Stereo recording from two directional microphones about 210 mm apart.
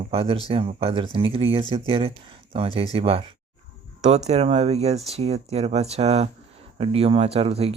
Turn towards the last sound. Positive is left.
turn(degrees=-30)  # may be behind; listen again after turning